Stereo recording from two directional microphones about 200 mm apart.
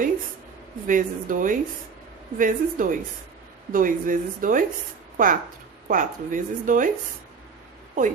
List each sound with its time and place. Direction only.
0.8 s speech: 40° right (ahead or behind)